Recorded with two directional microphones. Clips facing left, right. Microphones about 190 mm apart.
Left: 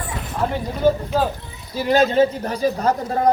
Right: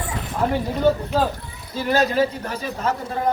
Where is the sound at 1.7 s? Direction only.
15° left (ahead or behind); by 3.3 s 40° left (ahead or behind).